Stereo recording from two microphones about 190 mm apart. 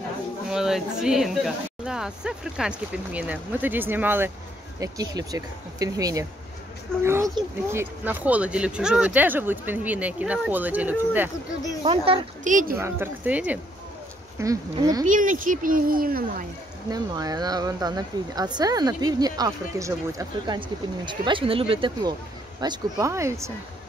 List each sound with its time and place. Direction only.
0.5 s speech: centre (ahead or behind)
11.8 s speech: 30° right (ahead or behind)
12.4 s speech: 45° right (ahead or behind)
12.7 s speech: 10° right (ahead or behind)
15.0 s speech: 45° right (ahead or behind)
16.9 s speech: 20° right (ahead or behind)